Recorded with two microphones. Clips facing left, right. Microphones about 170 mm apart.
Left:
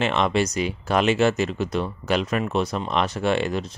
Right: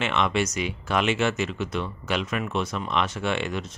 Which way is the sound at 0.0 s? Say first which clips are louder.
Left 3 dB; 35° left (ahead or behind).